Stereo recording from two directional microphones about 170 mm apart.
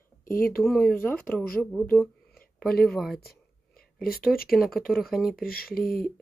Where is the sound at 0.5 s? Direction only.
Centre (ahead or behind).